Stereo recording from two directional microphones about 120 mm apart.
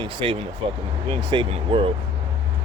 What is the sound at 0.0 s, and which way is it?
Speech, 45° right (ahead or behind).